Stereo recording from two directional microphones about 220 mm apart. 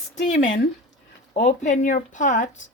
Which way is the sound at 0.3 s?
60° left (ahead or behind).